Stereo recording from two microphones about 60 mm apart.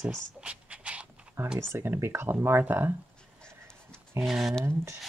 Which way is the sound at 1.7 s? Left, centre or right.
Right.